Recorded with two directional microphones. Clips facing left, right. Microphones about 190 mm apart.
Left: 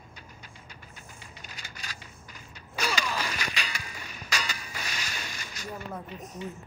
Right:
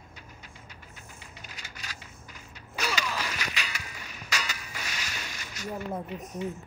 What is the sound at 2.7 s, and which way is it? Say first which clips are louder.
Mechanisms: left 1 dB; 35° left (ahead or behind).